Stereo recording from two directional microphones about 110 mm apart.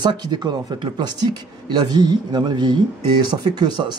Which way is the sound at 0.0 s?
40° right (ahead or behind).